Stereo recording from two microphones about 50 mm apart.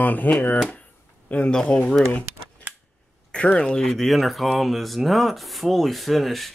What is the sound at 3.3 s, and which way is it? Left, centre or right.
Speech, left.